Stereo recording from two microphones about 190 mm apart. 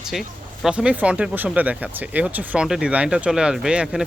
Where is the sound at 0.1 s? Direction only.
Centre (ahead or behind).